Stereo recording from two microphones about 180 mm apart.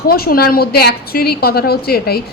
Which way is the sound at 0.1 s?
55° left (ahead or behind).